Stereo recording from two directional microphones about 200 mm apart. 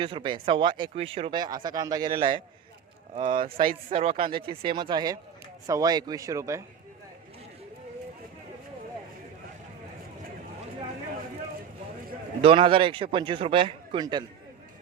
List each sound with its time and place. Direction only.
0.0 s a man's voice: 25° right (ahead or behind)
12.4 s a man's voice: 25° right (ahead or behind)